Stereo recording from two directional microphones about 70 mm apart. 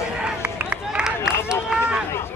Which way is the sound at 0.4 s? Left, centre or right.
Right.